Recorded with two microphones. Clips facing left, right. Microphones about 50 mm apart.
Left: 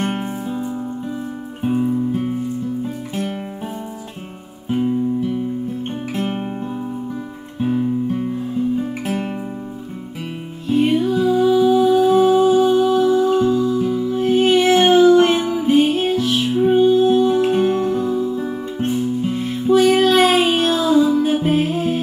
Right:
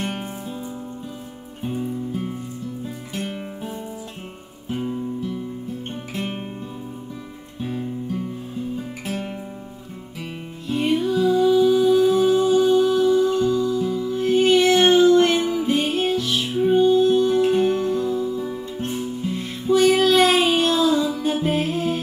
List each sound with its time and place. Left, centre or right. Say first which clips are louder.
0.1 s music: left 6 dB; left
1.9 s music: left 8 dB; left
9.0 s music: left 6 dB; left
10.7 s music: left 4 dB; centre; by 18.9 s left
19.3 s music: left 4 dB; centre